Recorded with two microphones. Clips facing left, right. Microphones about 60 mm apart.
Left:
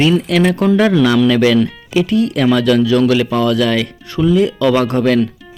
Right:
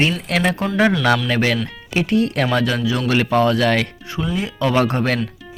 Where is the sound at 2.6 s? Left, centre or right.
Right.